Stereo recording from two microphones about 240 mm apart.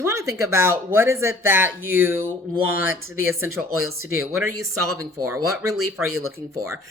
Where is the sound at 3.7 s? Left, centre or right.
Right.